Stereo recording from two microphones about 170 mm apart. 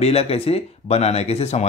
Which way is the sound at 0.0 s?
35° left (ahead or behind).